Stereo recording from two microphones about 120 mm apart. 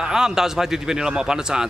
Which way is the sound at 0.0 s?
5° right (ahead or behind).